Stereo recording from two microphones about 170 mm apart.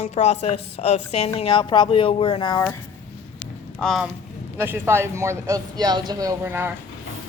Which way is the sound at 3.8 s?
Centre (ahead or behind).